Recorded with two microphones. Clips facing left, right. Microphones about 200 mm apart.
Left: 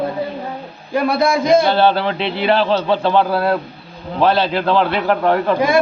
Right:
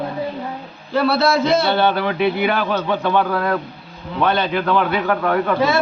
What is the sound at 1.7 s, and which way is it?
A man's voice, 30° left (ahead or behind).